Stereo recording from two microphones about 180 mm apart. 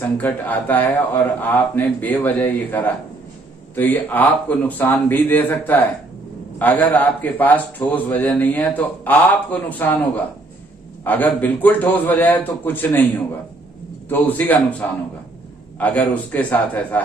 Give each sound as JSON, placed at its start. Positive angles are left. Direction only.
{"t": 0.2, "sound": "a man's voice", "side_deg": 10}
{"t": 14.0, "sound": "a man's voice", "side_deg": 10}